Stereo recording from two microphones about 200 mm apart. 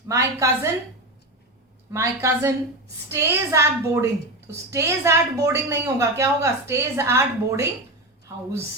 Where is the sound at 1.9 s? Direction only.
15° right (ahead or behind).